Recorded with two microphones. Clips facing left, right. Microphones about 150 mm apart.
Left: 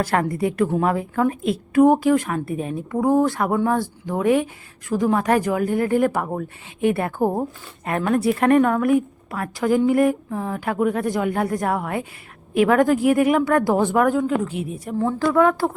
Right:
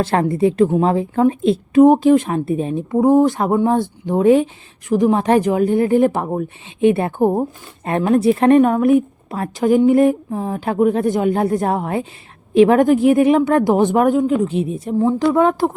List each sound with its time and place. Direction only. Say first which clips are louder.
0.0 s a woman's voice: right 5 dB; 25° right (ahead or behind)